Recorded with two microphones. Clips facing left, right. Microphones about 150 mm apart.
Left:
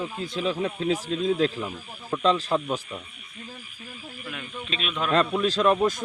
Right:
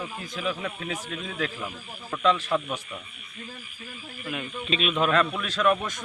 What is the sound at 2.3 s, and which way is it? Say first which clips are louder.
Speech: left 2 dB; 35° left (ahead or behind).